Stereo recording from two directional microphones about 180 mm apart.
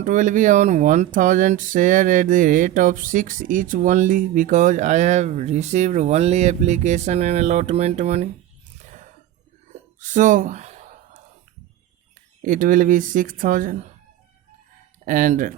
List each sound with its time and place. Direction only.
0.0 s speech: 45° right (ahead or behind)
10.0 s a sound: 45° right (ahead or behind)
12.4 s speech: 45° right (ahead or behind)
15.0 s speech: 45° right (ahead or behind)